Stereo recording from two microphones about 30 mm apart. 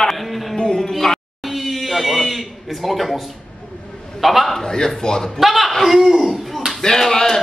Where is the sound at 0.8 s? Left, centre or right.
Centre.